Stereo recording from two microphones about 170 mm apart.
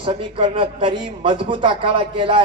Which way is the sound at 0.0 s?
30° right (ahead or behind).